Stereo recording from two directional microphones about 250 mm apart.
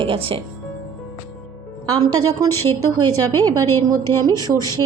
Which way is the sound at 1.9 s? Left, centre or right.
Right.